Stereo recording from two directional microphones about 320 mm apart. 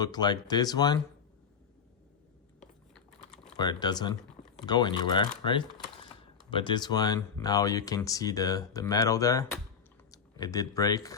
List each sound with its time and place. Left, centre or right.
0.0 s speech: centre
3.6 s speech: centre